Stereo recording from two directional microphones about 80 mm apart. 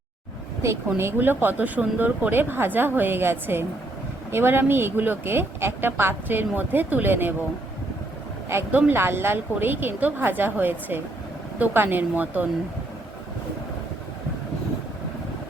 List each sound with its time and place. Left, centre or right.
0.6 s speech: right
8.4 s speech: right